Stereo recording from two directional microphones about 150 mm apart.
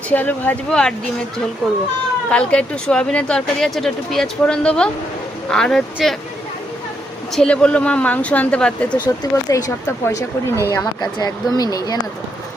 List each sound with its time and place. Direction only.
0.1 s speech: 10° left (ahead or behind)
2.3 s speech: 5° left (ahead or behind)
7.3 s speech: 5° left (ahead or behind)
9.0 s speech: 25° left (ahead or behind)